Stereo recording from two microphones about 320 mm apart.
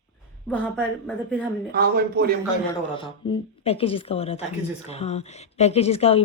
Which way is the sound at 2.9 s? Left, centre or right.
Centre.